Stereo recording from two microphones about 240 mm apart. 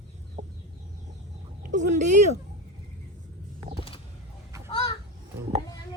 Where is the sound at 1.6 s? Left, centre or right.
Right.